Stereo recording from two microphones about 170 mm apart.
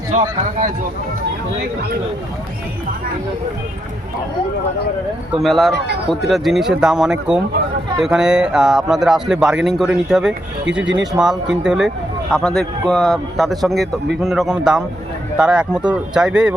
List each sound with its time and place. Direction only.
0.1 s speech: 50° right (ahead or behind)
5.4 s speech: centre (ahead or behind)